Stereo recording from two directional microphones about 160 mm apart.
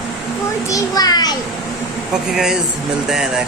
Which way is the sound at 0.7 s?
25° left (ahead or behind).